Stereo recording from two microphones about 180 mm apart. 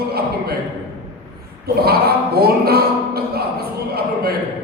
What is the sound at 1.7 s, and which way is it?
Speech, 60° right (ahead or behind).